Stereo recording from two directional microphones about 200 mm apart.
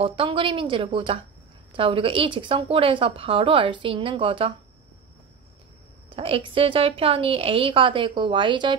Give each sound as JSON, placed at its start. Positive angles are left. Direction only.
{"t": 0.0, "sound": "a woman's voice", "side_deg": -25}
{"t": 6.0, "sound": "a woman's voice", "side_deg": -30}